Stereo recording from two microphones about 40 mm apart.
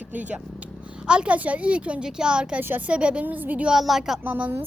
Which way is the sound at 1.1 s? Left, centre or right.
Right.